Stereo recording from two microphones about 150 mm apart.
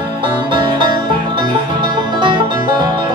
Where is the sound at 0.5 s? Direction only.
30° right (ahead or behind).